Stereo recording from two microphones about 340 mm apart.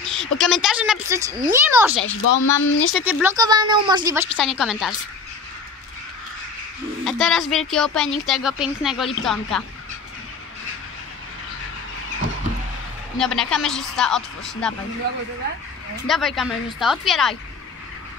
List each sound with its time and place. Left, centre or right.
0.0 s speech: centre
2.0 s speech: left
2.9 s speech: centre
7.1 s speech: centre
13.2 s speech: centre
16.1 s speech: centre